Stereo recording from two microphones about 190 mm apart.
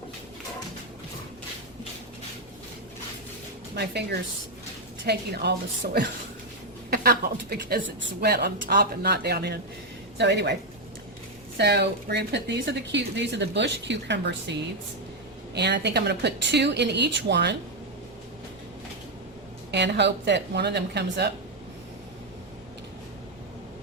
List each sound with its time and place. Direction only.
3.8 s a woman's voice: 60° right (ahead or behind)
15.5 s a woman's voice: 60° right (ahead or behind)
19.7 s a woman's voice: 65° right (ahead or behind)